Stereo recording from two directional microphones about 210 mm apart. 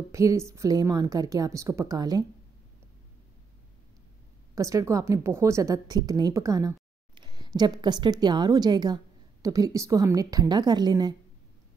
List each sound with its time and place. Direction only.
0.1 s a woman's voice: 15° right (ahead or behind)
4.6 s a woman's voice: 15° right (ahead or behind)